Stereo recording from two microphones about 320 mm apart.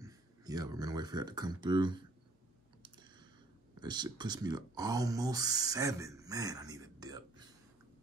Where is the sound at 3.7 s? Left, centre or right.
Centre.